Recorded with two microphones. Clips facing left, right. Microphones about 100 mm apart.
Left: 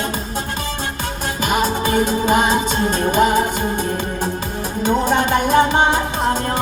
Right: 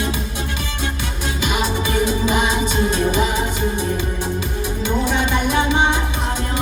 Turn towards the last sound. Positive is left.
turn(degrees=45)  # may be behind; listen again after turning